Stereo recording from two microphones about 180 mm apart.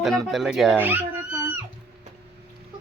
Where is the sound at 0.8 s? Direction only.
10° right (ahead or behind).